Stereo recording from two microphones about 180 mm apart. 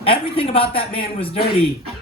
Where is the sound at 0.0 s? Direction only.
30° left (ahead or behind).